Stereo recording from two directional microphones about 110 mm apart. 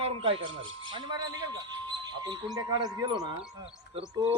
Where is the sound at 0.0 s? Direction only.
55° right (ahead or behind).